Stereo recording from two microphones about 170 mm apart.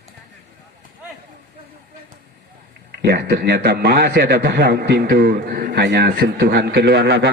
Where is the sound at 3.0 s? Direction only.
75° right (ahead or behind).